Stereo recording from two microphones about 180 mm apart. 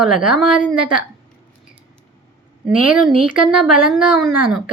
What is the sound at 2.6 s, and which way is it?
A woman's voice, 5° right (ahead or behind).